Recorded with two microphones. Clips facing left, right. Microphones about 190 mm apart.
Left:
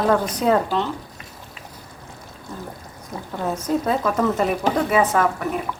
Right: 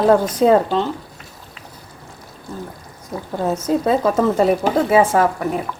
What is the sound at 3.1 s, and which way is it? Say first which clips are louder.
A woman's voice: right 5 dB; 35° right (ahead or behind).